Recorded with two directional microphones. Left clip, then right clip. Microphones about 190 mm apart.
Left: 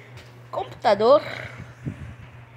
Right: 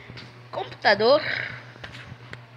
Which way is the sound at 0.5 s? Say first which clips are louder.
Even; 20° left (ahead or behind).